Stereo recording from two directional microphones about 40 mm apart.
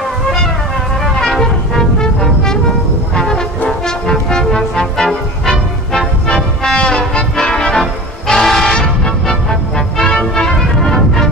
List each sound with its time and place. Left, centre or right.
1.1 s music: centre
3.6 s music: centre
8.3 s music: centre
8.7 s music: centre